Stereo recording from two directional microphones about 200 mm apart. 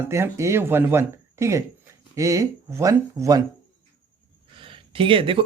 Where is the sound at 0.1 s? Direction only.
15° right (ahead or behind).